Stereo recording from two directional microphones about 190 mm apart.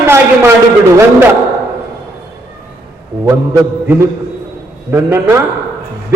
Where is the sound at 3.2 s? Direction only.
15° right (ahead or behind).